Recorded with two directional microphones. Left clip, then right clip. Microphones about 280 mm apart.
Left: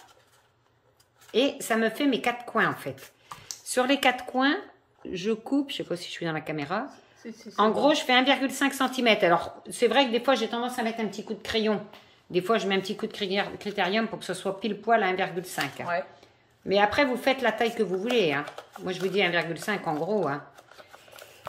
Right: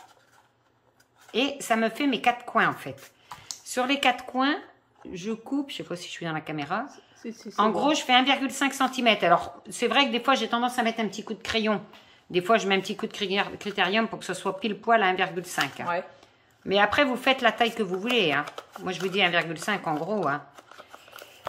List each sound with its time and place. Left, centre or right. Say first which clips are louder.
1.3 s speech: left 1 dB; centre